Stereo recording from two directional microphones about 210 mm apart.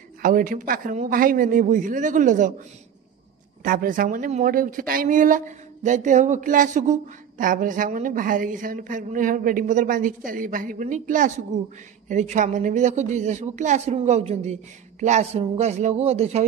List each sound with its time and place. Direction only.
0.2 s speech: 40° right (ahead or behind)
3.6 s speech: 40° right (ahead or behind)